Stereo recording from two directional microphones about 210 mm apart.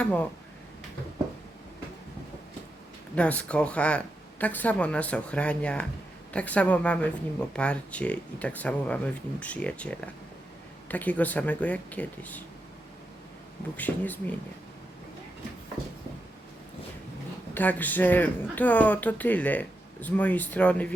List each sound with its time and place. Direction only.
0.0 s speech: 5° left (ahead or behind)
3.2 s speech: 5° left (ahead or behind)
13.7 s speech: 10° left (ahead or behind)
17.5 s speech: 10° left (ahead or behind)